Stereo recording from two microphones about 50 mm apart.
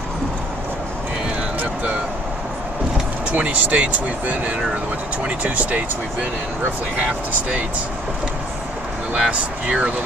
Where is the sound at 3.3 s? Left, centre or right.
Right.